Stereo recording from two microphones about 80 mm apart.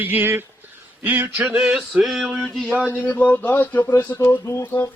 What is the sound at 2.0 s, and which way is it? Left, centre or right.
Male singing, centre.